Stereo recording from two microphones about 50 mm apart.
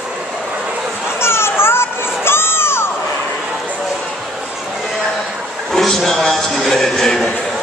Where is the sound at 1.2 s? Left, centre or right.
Left.